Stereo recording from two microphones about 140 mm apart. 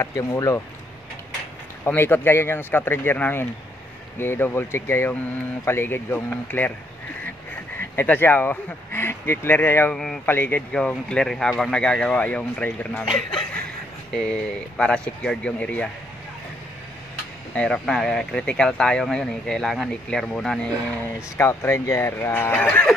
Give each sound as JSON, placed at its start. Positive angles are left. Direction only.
{"t": 0.0, "sound": "speech", "side_deg": 25}
{"t": 1.9, "sound": "speech", "side_deg": 15}
{"t": 7.9, "sound": "speech", "side_deg": 15}
{"t": 9.9, "sound": "speech", "side_deg": 5}
{"t": 10.2, "sound": "speech", "side_deg": 15}
{"t": 14.8, "sound": "speech", "side_deg": 5}
{"t": 17.6, "sound": "speech", "side_deg": 5}
{"t": 21.4, "sound": "speech", "side_deg": 20}